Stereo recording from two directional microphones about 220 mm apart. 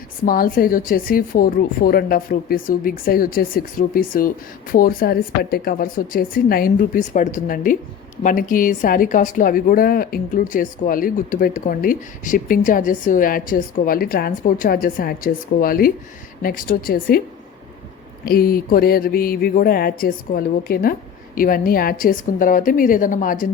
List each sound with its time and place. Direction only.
0.3 s a woman's voice: 40° left (ahead or behind)
18.3 s a sound: 40° left (ahead or behind)
21.3 s a woman's voice: 40° left (ahead or behind)